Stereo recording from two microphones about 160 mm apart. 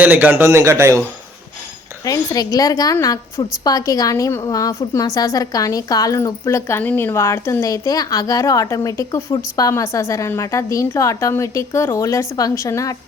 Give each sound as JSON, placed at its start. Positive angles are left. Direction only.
{"t": 0.0, "sound": "a man's voice", "side_deg": -10}
{"t": 2.0, "sound": "a woman's voice", "side_deg": 20}